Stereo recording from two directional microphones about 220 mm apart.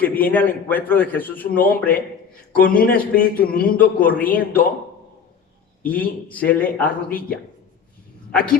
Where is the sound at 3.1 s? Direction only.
40° left (ahead or behind).